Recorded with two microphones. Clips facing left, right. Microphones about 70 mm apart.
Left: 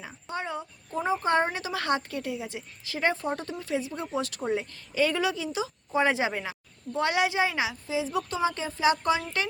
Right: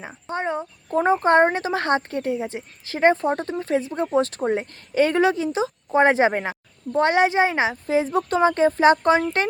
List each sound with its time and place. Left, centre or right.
0.0 s speech: right
0.9 s speech: right